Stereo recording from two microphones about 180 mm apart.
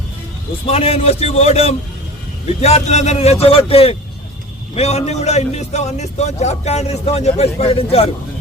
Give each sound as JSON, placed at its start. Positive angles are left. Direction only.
{"t": 0.7, "sound": "a man's voice", "side_deg": 35}